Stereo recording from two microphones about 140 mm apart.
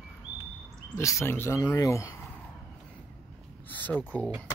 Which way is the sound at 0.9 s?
20° left (ahead or behind).